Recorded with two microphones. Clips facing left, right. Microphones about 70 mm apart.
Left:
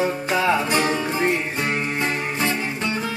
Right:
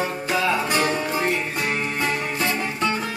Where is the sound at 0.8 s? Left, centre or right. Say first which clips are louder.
Left 1 dB; left.